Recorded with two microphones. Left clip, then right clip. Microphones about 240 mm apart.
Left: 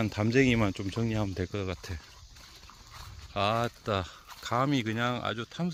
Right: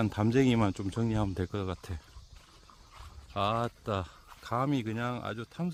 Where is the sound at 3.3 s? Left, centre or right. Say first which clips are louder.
Left 2 dB; centre.